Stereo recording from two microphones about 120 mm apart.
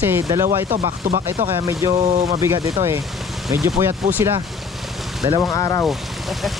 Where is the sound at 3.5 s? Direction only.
25° right (ahead or behind).